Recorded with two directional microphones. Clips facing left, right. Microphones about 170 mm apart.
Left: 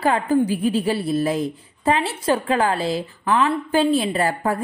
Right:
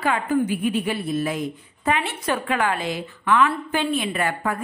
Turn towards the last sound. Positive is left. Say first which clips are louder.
# left 3 dB
turn(degrees=35)  # may be behind; listen again after turning